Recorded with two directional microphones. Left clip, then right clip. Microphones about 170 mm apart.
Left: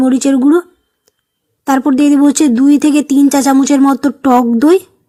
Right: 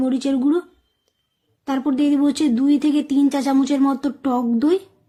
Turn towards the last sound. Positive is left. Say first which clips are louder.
# left 10 dB
turn(degrees=45)  # may be behind; listen again after turning